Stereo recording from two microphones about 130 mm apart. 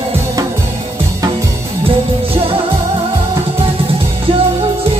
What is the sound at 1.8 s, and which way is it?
Music, 45° right (ahead or behind).